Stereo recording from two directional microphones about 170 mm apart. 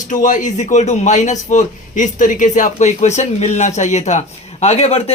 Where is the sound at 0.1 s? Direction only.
50° left (ahead or behind).